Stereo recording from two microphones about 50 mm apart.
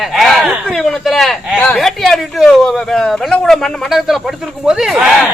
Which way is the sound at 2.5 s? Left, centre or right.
Centre.